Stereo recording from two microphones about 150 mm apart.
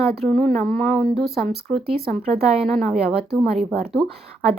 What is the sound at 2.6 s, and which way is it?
Speech, centre (ahead or behind).